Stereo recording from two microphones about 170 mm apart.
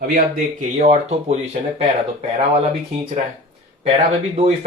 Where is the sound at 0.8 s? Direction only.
40° right (ahead or behind).